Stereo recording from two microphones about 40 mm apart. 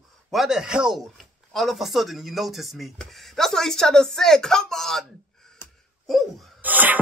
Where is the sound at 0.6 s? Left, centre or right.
Right.